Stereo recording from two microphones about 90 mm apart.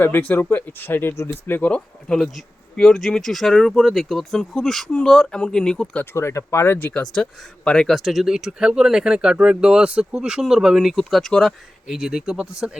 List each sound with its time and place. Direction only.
0.0 s speech: 20° left (ahead or behind)
6.1 s speech: 30° left (ahead or behind)
6.7 s speech: 15° left (ahead or behind); by 12.8 s 5° right (ahead or behind)